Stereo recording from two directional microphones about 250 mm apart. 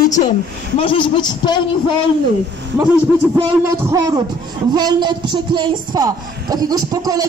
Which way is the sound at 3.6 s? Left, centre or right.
Centre.